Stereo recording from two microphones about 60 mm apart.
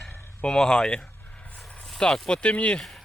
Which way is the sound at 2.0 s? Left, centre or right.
Centre.